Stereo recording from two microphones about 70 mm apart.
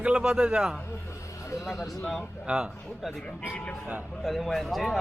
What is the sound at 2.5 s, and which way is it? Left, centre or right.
Speech, centre.